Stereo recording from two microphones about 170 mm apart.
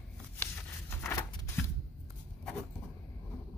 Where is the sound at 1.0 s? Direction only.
15° left (ahead or behind).